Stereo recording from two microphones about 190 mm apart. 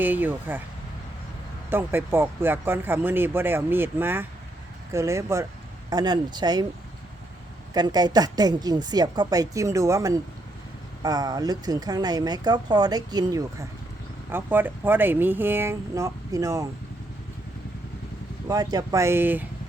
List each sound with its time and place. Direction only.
0.0 s speech: 10° right (ahead or behind)
1.7 s speech: 10° right (ahead or behind)
7.7 s speech: 20° right (ahead or behind)
18.4 s speech: 20° right (ahead or behind)